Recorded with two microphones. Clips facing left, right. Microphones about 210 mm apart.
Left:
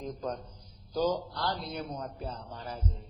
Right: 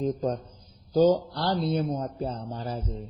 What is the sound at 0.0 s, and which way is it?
Speech, 30° right (ahead or behind).